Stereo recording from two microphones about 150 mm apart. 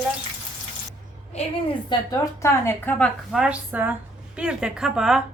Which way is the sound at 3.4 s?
10° right (ahead or behind).